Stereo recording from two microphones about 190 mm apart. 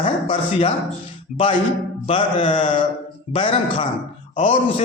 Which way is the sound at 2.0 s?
25° left (ahead or behind).